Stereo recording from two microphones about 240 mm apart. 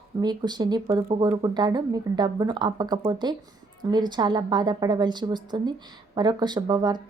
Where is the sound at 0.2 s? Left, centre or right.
Centre.